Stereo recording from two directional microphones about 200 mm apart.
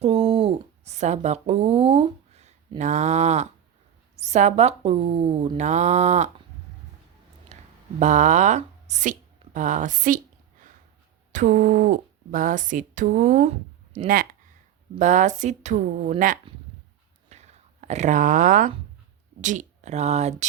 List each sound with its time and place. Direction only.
0.0 s speech: 30° right (ahead or behind)
7.5 s speech: 35° right (ahead or behind)
11.3 s speech: 40° right (ahead or behind)
17.2 s a sound: 35° right (ahead or behind)
19.4 s speech: 40° right (ahead or behind)